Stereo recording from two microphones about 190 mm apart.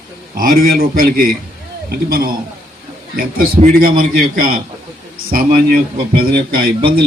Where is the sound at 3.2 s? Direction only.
50° right (ahead or behind).